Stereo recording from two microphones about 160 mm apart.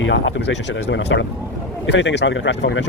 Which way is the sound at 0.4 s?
90° left.